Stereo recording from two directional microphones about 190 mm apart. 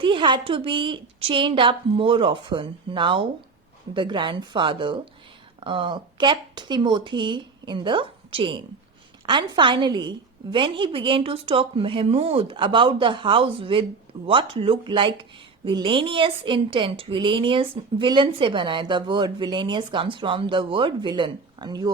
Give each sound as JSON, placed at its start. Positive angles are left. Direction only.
{"t": 0.0, "sound": "speech", "side_deg": -25}